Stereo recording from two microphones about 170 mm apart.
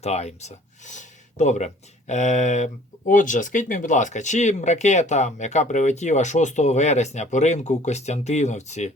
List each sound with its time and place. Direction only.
0.0 s speech: 40° left (ahead or behind)